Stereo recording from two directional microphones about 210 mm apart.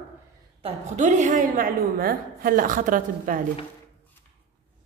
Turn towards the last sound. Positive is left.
turn(degrees=-40)  # may be behind; listen again after turning